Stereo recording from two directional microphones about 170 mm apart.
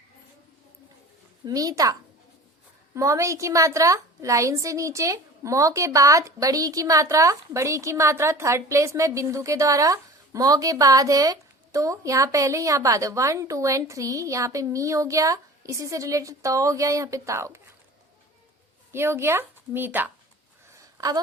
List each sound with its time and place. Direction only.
1.5 s a woman's voice: 20° right (ahead or behind)
18.9 s a woman's voice: 15° right (ahead or behind)
20.7 s a sound: 20° right (ahead or behind)